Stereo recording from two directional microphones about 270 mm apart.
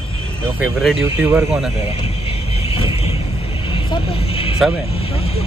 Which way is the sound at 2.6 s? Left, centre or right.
Left.